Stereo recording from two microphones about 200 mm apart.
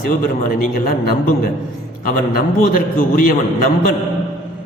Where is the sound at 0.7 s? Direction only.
50° left (ahead or behind).